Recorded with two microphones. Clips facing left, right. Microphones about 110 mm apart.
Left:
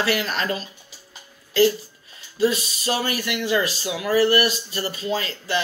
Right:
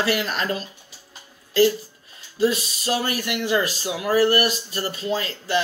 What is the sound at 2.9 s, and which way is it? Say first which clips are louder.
Speech: right 1 dB; 45° right (ahead or behind).